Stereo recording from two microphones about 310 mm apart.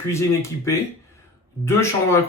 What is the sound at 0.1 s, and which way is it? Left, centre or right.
Speech, centre.